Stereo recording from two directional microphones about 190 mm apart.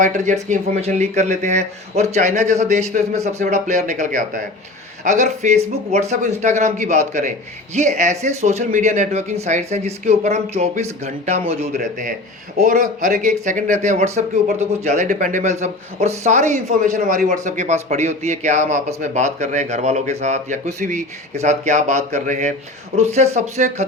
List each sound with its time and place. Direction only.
0.0 s a man's voice: 40° right (ahead or behind)